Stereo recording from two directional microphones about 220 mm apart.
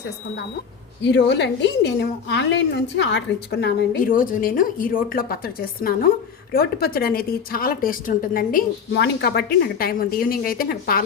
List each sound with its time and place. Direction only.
1.0 s a woman's voice: 50° left (ahead or behind)